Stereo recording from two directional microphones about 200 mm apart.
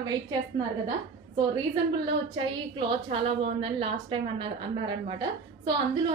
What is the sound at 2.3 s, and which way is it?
A woman's voice, 25° right (ahead or behind).